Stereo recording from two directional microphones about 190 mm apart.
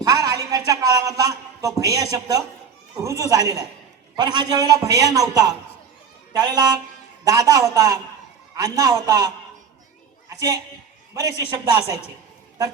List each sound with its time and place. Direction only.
0.0 s a man's voice: 20° right (ahead or behind)
11.8 s a woman's voice: 30° left (ahead or behind)